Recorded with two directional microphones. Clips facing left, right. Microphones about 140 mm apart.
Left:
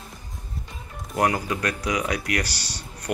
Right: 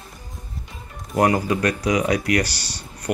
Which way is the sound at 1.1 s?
5° right (ahead or behind).